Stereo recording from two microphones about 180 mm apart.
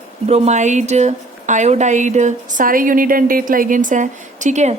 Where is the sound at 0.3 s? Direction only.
35° right (ahead or behind).